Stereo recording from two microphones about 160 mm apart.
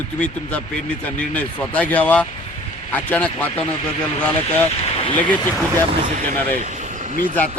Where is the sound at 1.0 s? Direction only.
10° left (ahead or behind).